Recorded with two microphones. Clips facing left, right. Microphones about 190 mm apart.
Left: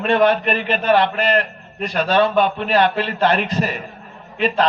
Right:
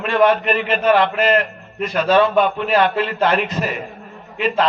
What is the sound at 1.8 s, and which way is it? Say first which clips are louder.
Speech: right 2 dB; centre (ahead or behind).